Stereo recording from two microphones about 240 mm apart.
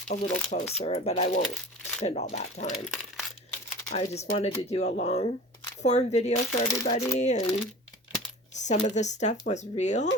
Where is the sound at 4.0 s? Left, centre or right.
Left.